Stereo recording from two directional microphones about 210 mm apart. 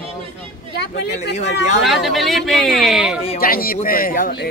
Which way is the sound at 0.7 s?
55° left (ahead or behind).